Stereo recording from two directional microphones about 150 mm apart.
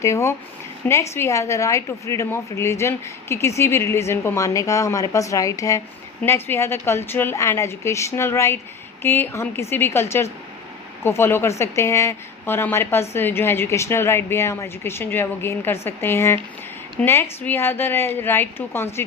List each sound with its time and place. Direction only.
0.0 s a woman's voice: 20° left (ahead or behind)